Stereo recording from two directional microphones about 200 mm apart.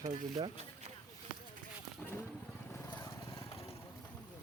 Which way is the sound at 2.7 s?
10° left (ahead or behind).